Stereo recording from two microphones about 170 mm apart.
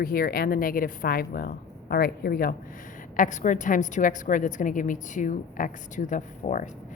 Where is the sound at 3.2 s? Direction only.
45° left (ahead or behind).